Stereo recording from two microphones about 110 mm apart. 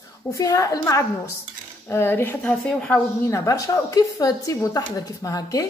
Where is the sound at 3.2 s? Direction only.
30° left (ahead or behind).